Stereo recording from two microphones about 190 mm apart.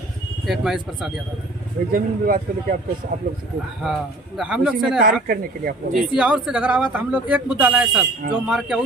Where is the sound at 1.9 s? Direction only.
50° right (ahead or behind).